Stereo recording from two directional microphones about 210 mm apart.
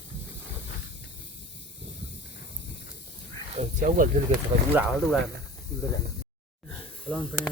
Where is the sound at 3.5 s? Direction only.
30° right (ahead or behind).